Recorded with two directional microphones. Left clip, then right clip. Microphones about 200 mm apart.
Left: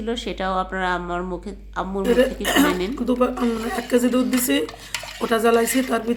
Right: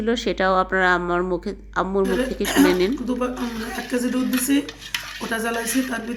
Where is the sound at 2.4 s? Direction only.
55° left (ahead or behind).